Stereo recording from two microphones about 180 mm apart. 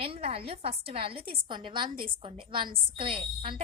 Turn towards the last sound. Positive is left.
turn(degrees=-30)  # may be behind; listen again after turning